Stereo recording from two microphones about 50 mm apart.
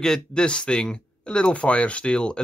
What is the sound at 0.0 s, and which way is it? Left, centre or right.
Speech, centre.